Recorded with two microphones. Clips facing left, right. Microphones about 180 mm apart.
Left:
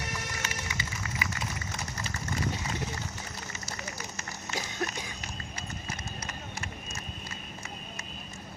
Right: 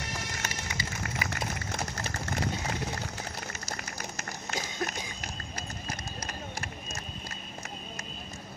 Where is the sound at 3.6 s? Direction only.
40° right (ahead or behind).